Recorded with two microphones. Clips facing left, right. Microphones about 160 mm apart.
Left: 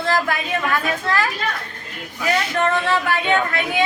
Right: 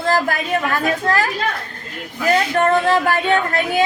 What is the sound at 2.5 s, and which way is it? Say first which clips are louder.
A woman's voice: right 4 dB; 45° right (ahead or behind).